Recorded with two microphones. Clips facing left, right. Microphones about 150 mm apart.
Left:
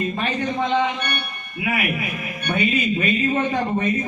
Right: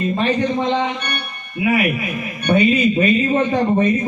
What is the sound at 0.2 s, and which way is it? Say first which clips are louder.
A man's voice: right 5 dB; 25° right (ahead or behind).